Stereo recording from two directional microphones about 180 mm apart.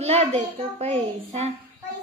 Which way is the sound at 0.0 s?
35° right (ahead or behind).